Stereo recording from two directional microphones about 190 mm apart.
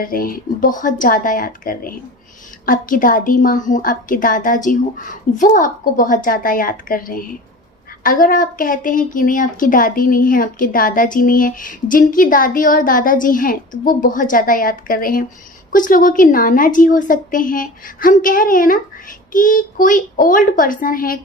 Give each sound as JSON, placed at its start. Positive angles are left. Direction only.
{"t": 0.0, "sound": "a woman's voice", "side_deg": 50}